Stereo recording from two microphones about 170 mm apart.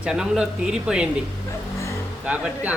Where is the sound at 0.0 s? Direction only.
5° right (ahead or behind).